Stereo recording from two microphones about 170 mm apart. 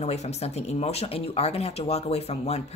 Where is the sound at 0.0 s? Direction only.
40° left (ahead or behind).